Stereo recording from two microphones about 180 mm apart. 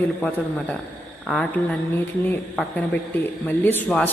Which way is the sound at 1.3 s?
10° left (ahead or behind).